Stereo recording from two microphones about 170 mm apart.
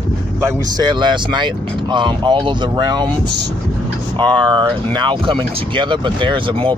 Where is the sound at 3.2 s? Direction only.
80° right.